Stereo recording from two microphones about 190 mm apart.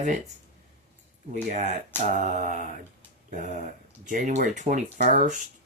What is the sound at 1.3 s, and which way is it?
Speech, 45° right (ahead or behind).